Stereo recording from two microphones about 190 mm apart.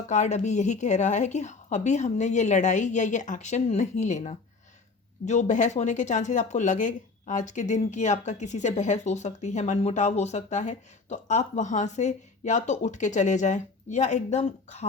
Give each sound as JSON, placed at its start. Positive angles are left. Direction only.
{"t": 0.1, "sound": "speech", "side_deg": 40}